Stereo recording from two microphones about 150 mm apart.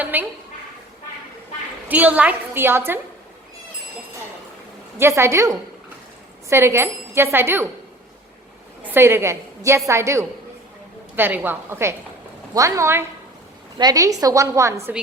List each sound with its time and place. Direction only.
0.0 s a woman's voice: 10° right (ahead or behind)
1.9 s a woman's voice: 10° right (ahead or behind)
4.9 s a woman's voice: 15° right (ahead or behind)
8.8 s a woman's voice: 15° right (ahead or behind)